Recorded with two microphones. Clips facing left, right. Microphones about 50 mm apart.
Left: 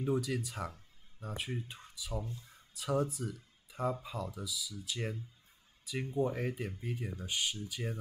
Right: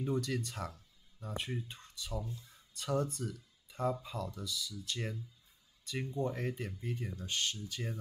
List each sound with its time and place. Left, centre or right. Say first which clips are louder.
0.0 s speech: left 2 dB; centre
2.3 s a sound: even; left
2.7 s speech: left 1 dB; centre